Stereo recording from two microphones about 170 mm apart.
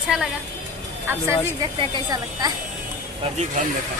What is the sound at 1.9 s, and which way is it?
Speech, 25° right (ahead or behind).